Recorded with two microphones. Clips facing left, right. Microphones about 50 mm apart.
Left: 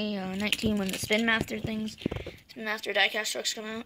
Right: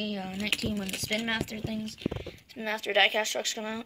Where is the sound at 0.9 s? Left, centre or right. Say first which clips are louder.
Left 5 dB; left.